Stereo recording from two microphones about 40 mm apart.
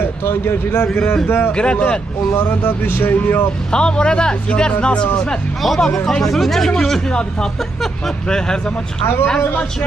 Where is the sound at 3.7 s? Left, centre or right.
Left.